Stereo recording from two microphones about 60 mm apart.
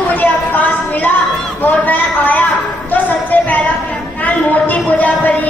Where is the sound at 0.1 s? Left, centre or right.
Left.